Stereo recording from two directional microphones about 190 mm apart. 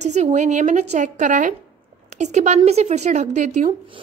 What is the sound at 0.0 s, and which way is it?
A woman's voice, 35° right (ahead or behind).